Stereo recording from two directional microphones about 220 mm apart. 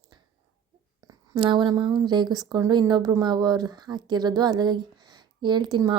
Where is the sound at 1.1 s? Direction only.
20° right (ahead or behind).